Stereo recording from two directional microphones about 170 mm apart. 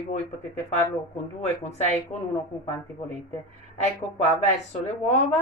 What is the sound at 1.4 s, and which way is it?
Speech, 40° left (ahead or behind).